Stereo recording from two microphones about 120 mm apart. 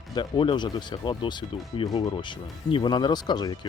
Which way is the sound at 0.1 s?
40° left (ahead or behind).